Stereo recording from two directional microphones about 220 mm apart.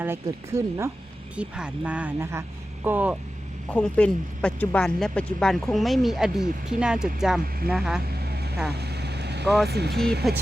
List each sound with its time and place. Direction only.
0.0 s speech: 10° right (ahead or behind)
3.7 s speech: 5° left (ahead or behind)
8.7 s vehicle: 50° right (ahead or behind)
9.6 s speech: 50° right (ahead or behind)
10.2 s speech: centre (ahead or behind)